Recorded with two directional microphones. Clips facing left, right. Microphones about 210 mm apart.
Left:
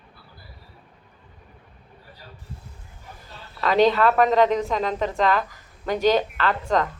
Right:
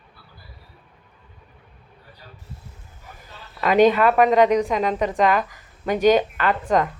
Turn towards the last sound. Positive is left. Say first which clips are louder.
# right 2 dB
turn(degrees=-15)  # may be behind; listen again after turning